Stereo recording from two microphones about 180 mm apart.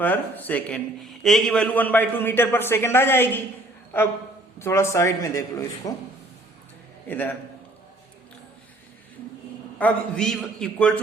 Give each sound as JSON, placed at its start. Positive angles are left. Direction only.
{"t": 0.0, "sound": "a man's voice", "side_deg": 10}
{"t": 7.1, "sound": "a man's voice", "side_deg": 10}
{"t": 9.7, "sound": "a man's voice", "side_deg": 5}